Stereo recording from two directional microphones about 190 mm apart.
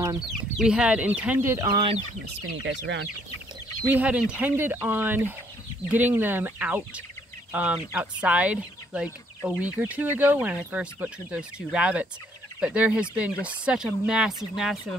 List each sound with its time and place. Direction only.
0.3 s speech: 5° right (ahead or behind); by 2.0 s 25° right (ahead or behind)
2.2 s speech: 70° right (ahead or behind)
3.8 s speech: 10° right (ahead or behind)